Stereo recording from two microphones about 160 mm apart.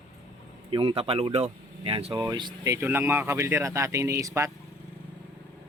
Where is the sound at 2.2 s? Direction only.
25° right (ahead or behind).